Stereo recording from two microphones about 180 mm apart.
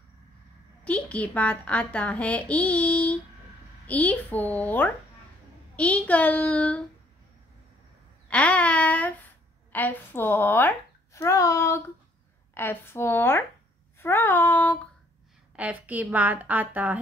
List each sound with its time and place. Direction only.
0.8 s a child's voice: 5° left (ahead or behind)
8.3 s a woman's voice: 5° left (ahead or behind)
15.5 s a woman's voice: 10° right (ahead or behind)